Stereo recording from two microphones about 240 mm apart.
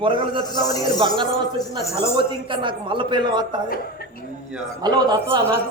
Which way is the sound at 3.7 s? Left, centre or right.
Left.